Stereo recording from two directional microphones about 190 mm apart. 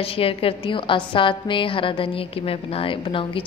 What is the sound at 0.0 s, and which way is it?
A woman's voice, 30° left (ahead or behind).